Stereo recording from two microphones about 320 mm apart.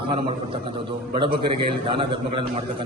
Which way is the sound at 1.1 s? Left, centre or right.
Centre.